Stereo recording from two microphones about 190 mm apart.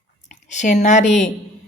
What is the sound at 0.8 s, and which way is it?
Speech, 40° left (ahead or behind).